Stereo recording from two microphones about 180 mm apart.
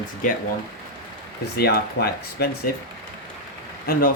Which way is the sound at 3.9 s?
55° left (ahead or behind).